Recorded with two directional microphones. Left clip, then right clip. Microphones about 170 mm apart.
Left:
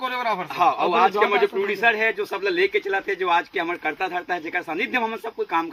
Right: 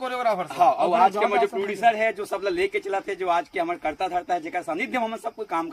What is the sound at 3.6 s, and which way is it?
A man's voice, 20° right (ahead or behind).